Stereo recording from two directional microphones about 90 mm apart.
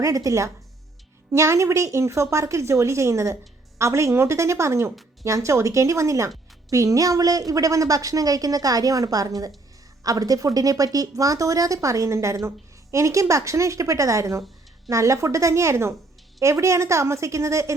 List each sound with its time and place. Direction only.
0.0 s speech: 40° right (ahead or behind)